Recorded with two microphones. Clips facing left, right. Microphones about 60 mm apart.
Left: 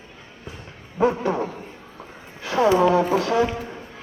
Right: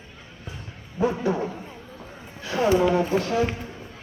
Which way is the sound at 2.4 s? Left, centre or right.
Left.